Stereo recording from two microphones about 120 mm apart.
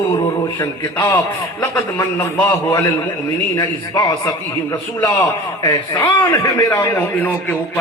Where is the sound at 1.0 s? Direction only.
30° left (ahead or behind).